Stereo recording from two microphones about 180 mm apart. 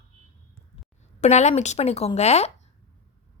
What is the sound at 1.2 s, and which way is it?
A woman's voice, 40° left (ahead or behind).